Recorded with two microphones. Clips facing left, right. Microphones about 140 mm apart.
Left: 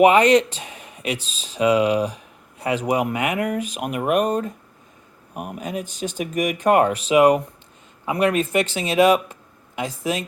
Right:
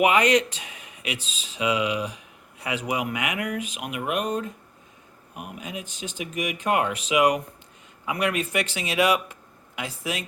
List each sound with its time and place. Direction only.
0.0 s speech: 30° left (ahead or behind)